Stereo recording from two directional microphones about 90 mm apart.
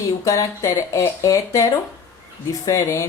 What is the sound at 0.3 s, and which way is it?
A woman's voice, 40° left (ahead or behind).